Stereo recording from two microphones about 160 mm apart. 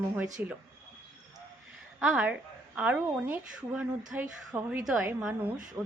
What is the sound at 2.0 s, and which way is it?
A woman's voice, 5° right (ahead or behind).